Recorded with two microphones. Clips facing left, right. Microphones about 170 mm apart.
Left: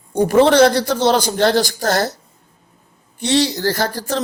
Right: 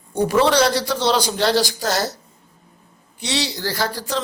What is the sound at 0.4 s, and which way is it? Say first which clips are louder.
Speech: left 5 dB; 50° left (ahead or behind).